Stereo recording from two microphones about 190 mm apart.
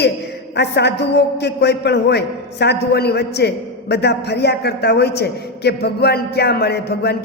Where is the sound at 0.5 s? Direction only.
65° left (ahead or behind).